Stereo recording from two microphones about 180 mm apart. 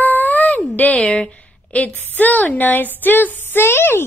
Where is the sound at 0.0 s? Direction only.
10° left (ahead or behind).